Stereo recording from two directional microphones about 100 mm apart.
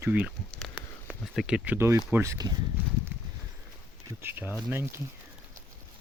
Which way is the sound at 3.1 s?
20° right (ahead or behind).